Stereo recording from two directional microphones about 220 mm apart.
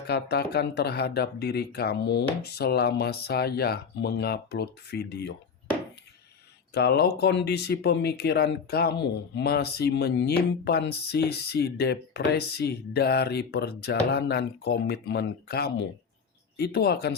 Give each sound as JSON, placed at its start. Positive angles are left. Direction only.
{"t": 0.1, "sound": "speech", "side_deg": 50}
{"t": 6.7, "sound": "speech", "side_deg": 45}